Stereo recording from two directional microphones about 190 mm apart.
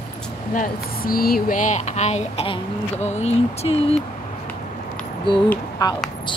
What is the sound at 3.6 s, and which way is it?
Speech, 30° left (ahead or behind).